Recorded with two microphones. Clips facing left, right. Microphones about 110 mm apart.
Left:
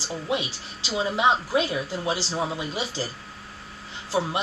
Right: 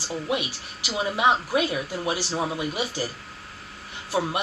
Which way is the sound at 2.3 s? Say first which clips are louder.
Right 1 dB; 20° right (ahead or behind).